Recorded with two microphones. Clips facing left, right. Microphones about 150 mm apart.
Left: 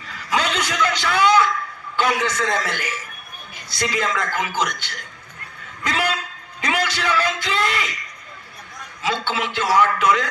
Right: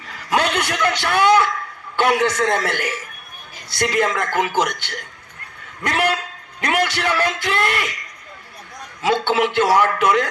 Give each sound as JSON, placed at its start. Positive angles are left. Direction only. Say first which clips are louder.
{"t": 0.1, "sound": "a sound", "louder": "right 3 dB", "side_deg": -55}
{"t": 2.0, "sound": "a man's voice", "louder": "right 4 dB", "side_deg": -60}
{"t": 9.0, "sound": "a man's voice", "louder": "right 6 dB", "side_deg": -60}